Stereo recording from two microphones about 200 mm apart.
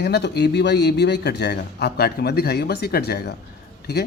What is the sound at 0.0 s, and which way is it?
A man's voice, 55° left (ahead or behind).